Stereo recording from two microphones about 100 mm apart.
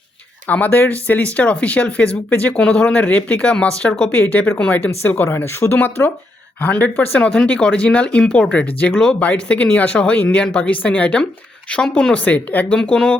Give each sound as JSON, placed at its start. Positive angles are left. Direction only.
{"t": 0.4, "sound": "speech", "side_deg": 15}